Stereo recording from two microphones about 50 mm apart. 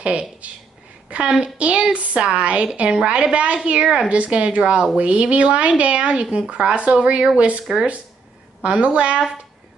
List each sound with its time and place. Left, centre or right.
0.0 s a woman's voice: right
8.6 s a woman's voice: right